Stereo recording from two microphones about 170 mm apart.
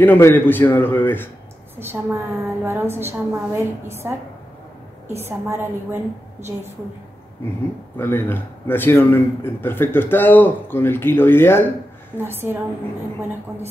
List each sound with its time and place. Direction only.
0.0 s a man's voice: 10° left (ahead or behind)
1.8 s a woman's voice: 15° right (ahead or behind)
5.2 s a woman's voice: 15° right (ahead or behind)
8.0 s a man's voice: 10° left (ahead or behind)
12.2 s a woman's voice: 15° right (ahead or behind)